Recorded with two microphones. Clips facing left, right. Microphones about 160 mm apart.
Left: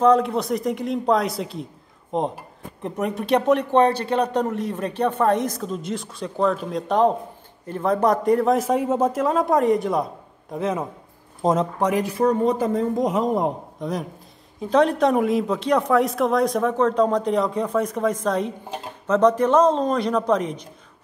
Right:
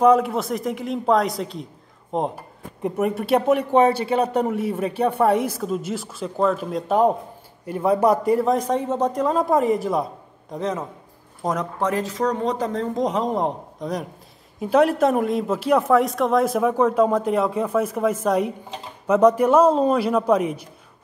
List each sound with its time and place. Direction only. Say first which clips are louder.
0.0 s a man's voice: right 1 dB; 5° right (ahead or behind)
11.4 s speech: left 5 dB; 25° left (ahead or behind)
11.8 s a man's voice: even; 15° left (ahead or behind); by 20.6 s 10° right (ahead or behind)